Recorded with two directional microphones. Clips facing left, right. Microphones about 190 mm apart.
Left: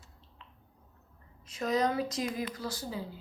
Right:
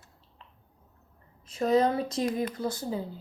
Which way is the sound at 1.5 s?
30° right (ahead or behind).